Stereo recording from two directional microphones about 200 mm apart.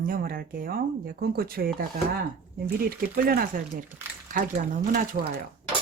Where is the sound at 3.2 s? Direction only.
45° right (ahead or behind).